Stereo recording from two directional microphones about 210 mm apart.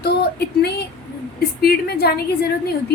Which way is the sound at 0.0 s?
50° left (ahead or behind).